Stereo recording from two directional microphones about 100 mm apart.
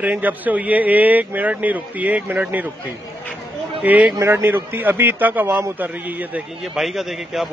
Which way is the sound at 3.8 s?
15° right (ahead or behind).